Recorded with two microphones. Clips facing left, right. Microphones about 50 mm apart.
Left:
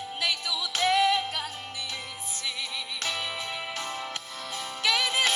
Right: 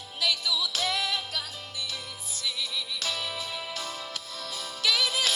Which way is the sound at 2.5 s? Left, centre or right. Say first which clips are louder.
Right 2 dB; left.